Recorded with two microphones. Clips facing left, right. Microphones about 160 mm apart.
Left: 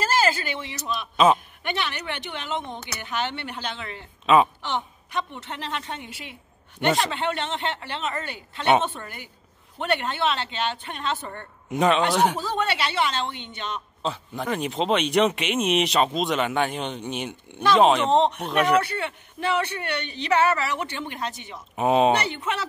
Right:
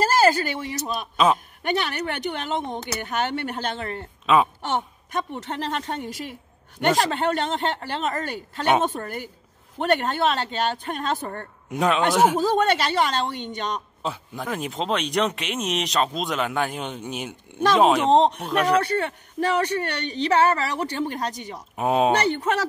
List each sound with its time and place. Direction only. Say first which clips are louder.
0.0 s speech: right 4 dB; 45° right (ahead or behind)
1.1 s speech: left 2 dB; centre (ahead or behind)
1.6 s speech: right 4 dB; 40° right (ahead or behind)
11.7 s speech: even; centre (ahead or behind)
12.4 s speech: right 6 dB; 40° right (ahead or behind)
14.0 s speech: left 3 dB; 5° right (ahead or behind)
18.1 s speech: right 2 dB; 40° right (ahead or behind)
18.4 s speech: even; centre (ahead or behind)
18.9 s speech: right 5 dB; 40° right (ahead or behind)
21.7 s speech: left 1 dB; centre (ahead or behind)
22.4 s speech: right 5 dB; 40° right (ahead or behind)